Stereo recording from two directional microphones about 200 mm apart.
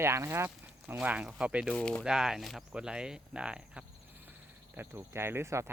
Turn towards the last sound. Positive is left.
turn(degrees=-15)  # may be behind; listen again after turning